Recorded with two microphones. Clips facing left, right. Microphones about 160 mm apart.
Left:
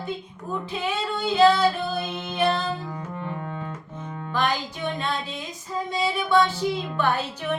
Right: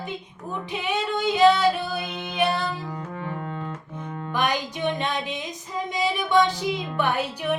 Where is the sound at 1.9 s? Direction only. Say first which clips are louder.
Even; 15° right (ahead or behind).